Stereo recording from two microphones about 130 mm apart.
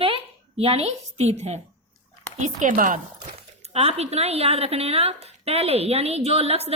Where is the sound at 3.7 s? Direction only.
55° right (ahead or behind).